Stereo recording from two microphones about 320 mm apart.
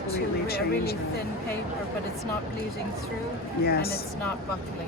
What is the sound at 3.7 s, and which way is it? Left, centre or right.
Speech, left.